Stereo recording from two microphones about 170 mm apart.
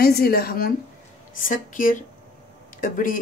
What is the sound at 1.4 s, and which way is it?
Speech, 50° left (ahead or behind).